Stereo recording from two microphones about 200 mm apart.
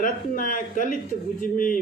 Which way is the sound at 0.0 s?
40° left (ahead or behind).